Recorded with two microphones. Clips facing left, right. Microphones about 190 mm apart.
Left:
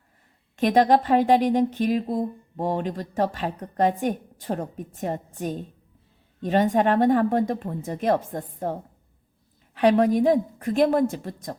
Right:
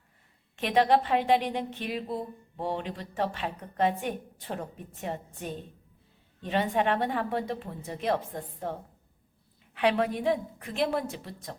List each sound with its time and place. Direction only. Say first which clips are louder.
0.5 s a woman's voice: left 5 dB; 40° left (ahead or behind)